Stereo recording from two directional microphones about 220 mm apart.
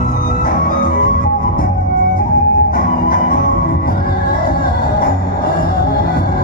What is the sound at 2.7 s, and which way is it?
Music, 40° left (ahead or behind).